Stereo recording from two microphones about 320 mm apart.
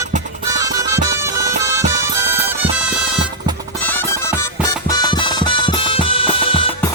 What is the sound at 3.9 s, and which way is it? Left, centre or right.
Music, centre.